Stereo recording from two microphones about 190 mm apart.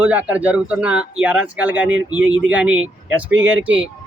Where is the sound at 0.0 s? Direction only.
5° right (ahead or behind).